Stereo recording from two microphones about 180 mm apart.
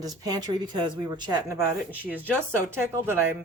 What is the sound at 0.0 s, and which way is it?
Speech, 20° right (ahead or behind).